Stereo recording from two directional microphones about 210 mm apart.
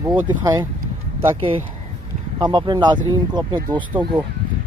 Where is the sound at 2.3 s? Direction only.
20° right (ahead or behind).